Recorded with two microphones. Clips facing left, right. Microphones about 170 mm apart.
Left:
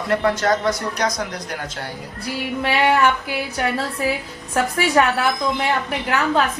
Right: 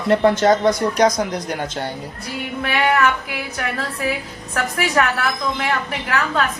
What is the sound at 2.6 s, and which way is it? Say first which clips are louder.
A woman's voice: left 1 dB; 30° left (ahead or behind).